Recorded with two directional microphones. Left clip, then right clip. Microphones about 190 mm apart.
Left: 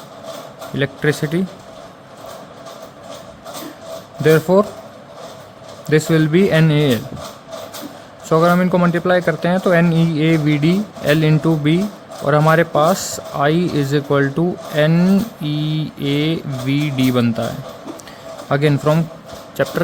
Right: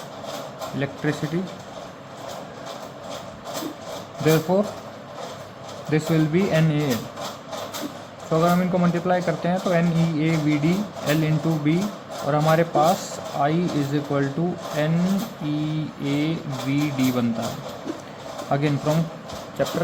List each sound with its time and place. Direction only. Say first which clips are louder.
0.8 s speech: left 9 dB; 50° left (ahead or behind)
4.2 s speech: left 8 dB; 45° left (ahead or behind)
5.9 s speech: left 7 dB; 50° left (ahead or behind)
8.3 s speech: left 7 dB; 50° left (ahead or behind)
18.5 s speech: left 7 dB; 50° left (ahead or behind)